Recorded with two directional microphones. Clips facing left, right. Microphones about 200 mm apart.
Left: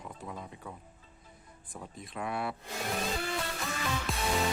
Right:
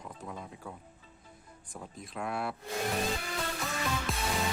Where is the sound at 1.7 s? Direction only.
Centre (ahead or behind).